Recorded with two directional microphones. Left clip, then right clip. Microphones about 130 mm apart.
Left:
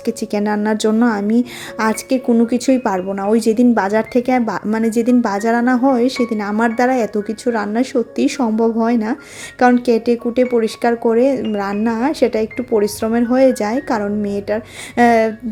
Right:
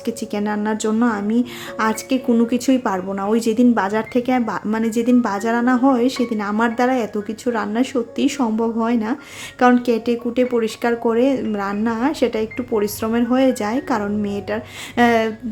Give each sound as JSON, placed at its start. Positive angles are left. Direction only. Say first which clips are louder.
{"t": 0.0, "sound": "speech", "louder": "left 4 dB", "side_deg": 30}